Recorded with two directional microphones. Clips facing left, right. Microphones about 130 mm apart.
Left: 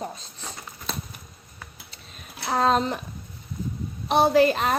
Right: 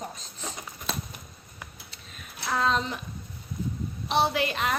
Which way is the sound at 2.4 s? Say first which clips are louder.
Left 5 dB; 40° left (ahead or behind).